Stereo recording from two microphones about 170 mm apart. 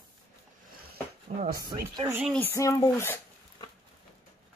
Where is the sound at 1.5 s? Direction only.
20° right (ahead or behind).